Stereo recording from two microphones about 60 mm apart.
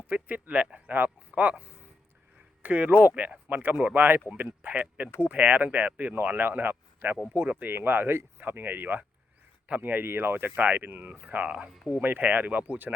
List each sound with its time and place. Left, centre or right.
0.1 s speech: right
2.6 s speech: right
11.4 s speech: centre
11.9 s speech: right